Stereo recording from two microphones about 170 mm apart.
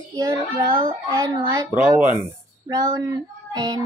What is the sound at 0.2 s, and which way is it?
Music, 20° right (ahead or behind).